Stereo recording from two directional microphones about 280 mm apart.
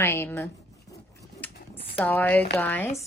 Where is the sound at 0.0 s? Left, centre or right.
Centre.